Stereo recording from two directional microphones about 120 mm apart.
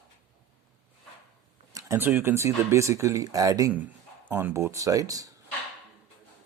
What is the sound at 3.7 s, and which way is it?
Speech, 15° right (ahead or behind).